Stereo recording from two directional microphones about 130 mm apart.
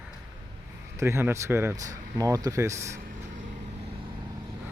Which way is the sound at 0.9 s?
20° right (ahead or behind).